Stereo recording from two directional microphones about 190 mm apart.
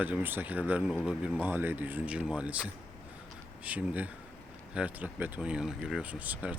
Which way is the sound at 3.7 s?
5° right (ahead or behind).